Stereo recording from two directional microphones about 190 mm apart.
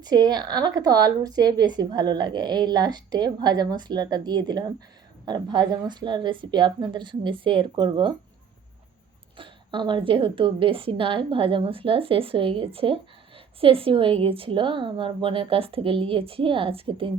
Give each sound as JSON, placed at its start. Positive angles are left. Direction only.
{"t": 0.0, "sound": "a woman's voice", "side_deg": -20}
{"t": 9.4, "sound": "a woman's voice", "side_deg": -25}